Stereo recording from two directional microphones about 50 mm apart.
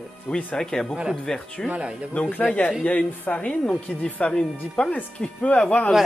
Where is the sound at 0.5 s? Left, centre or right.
Centre.